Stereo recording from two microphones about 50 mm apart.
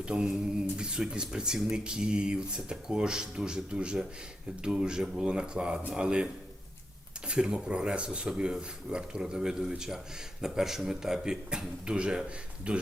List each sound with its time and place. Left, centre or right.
0.0 s a sound: centre
0.8 s speech: centre
7.3 s speech: centre